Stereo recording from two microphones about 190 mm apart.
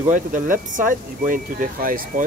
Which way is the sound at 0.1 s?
45° right (ahead or behind).